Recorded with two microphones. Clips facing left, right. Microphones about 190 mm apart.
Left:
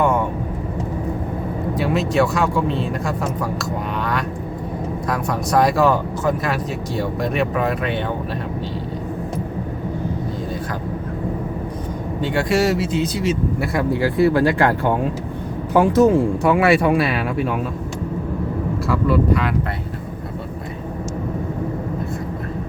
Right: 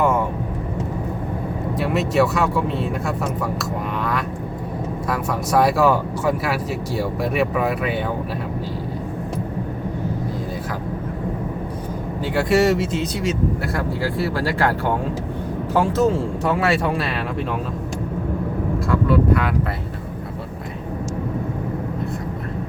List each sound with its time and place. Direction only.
1.7 s speech: centre (ahead or behind)
5.0 s speech: 5° right (ahead or behind)
12.2 s speech: 5° right (ahead or behind)
13.6 s speech: 15° left (ahead or behind)
18.9 s speech: centre (ahead or behind)